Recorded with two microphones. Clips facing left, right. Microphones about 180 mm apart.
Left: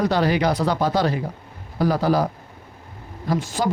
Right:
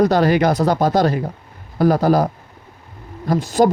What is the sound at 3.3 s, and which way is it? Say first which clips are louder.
Speech: right 7 dB; 45° right (ahead or behind).